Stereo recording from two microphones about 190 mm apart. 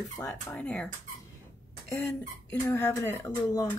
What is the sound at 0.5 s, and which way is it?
Speech, 5° left (ahead or behind).